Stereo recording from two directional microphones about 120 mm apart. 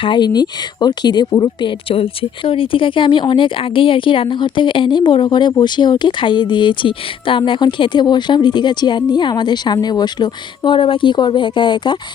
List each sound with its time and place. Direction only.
0.0 s speech: 40° left (ahead or behind)